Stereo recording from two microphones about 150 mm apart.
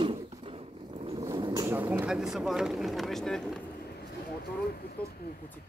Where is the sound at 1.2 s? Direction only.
25° right (ahead or behind).